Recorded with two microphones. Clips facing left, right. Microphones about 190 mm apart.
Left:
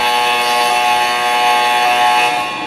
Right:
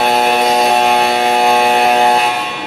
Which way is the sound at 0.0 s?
45° right (ahead or behind).